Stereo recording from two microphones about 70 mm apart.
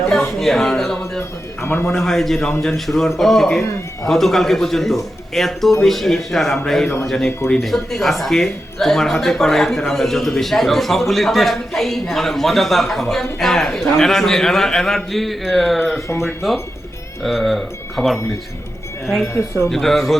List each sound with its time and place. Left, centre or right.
0.3 s speech: centre
1.6 s speech: left
1.9 s speech: centre
3.6 s speech: left
4.1 s speech: centre
7.6 s speech: centre
19.2 s speech: left
19.7 s speech: centre